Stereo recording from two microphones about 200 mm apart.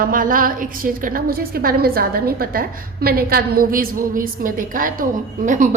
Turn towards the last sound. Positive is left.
turn(degrees=-40)  # may be behind; listen again after turning